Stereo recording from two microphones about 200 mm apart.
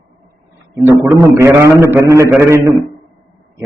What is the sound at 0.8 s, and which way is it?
Speech, centre (ahead or behind).